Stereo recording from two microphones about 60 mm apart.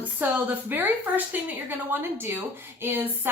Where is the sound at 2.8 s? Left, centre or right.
Right.